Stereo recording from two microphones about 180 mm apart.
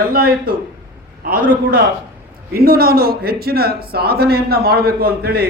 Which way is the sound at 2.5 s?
55° right (ahead or behind).